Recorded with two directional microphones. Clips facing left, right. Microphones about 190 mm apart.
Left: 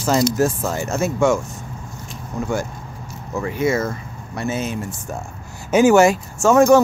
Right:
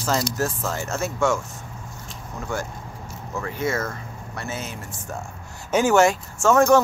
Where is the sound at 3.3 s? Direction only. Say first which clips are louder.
Left 6 dB; 15° left (ahead or behind).